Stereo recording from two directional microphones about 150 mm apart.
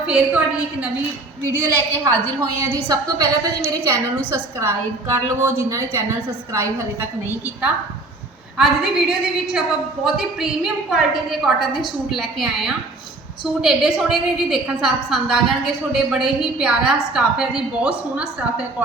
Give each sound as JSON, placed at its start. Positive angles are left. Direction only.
{"t": 0.1, "sound": "a woman's voice", "side_deg": -10}
{"t": 7.3, "sound": "a woman's voice", "side_deg": -15}